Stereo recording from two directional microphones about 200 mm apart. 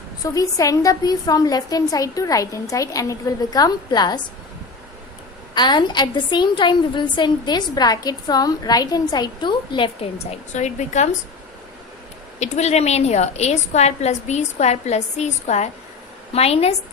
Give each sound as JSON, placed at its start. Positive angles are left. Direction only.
{"t": 0.2, "sound": "a woman's voice", "side_deg": 15}
{"t": 5.5, "sound": "a woman's voice", "side_deg": 20}
{"t": 10.5, "sound": "a woman's voice", "side_deg": 35}
{"t": 12.4, "sound": "a woman's voice", "side_deg": 35}